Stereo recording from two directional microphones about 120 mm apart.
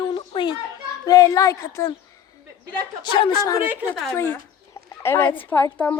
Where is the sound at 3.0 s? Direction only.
40° left (ahead or behind).